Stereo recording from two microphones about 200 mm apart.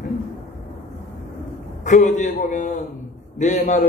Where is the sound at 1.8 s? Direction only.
35° left (ahead or behind).